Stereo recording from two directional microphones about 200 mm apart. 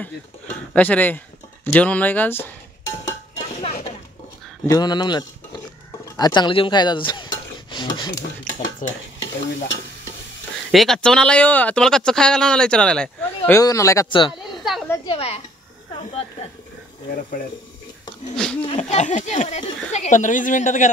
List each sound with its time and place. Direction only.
0.7 s speech: 10° left (ahead or behind)
4.6 s speech: 20° left (ahead or behind)
7.7 s a sound: 20° left (ahead or behind)
8.8 s a woman's voice: 40° left (ahead or behind)
10.7 s speech: centre (ahead or behind)
13.6 s speech: 15° left (ahead or behind)
14.3 s a sound: centre (ahead or behind)
15.0 s a woman's voice: 30° left (ahead or behind)
16.0 s a sound: 30° left (ahead or behind)
18.3 s speech: 5° left (ahead or behind)
18.8 s a woman's voice: 35° left (ahead or behind)